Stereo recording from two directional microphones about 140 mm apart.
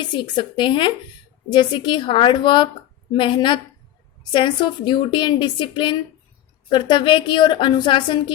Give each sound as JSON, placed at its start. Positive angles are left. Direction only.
{"t": 0.0, "sound": "a woman's voice", "side_deg": 35}